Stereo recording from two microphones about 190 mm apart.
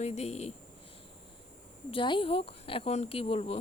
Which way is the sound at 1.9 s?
25° left (ahead or behind).